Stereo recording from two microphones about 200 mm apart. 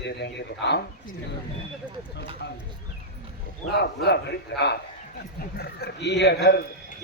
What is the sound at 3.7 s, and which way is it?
Speech, 55° left (ahead or behind).